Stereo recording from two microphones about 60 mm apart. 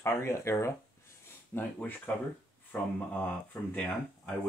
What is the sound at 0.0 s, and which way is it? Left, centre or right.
Speech, left.